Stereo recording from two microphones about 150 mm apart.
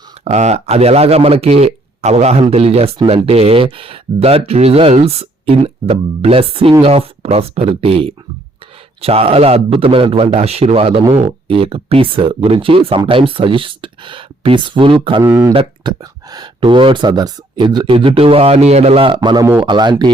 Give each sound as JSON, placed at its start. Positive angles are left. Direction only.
{"t": 0.3, "sound": "speech", "side_deg": -50}
{"t": 15.2, "sound": "speech", "side_deg": -15}
{"t": 15.5, "sound": "speech", "side_deg": -30}